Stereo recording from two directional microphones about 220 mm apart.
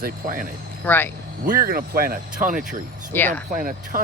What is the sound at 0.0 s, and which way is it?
Speech, 40° right (ahead or behind).